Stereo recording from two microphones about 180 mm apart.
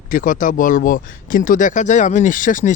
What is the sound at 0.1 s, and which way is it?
Speech, 45° left (ahead or behind).